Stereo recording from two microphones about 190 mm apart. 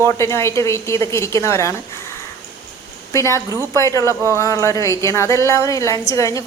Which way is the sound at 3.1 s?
15° left (ahead or behind).